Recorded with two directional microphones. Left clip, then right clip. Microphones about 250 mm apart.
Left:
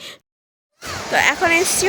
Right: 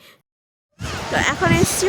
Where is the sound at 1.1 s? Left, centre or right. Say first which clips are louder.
Left 3 dB; centre.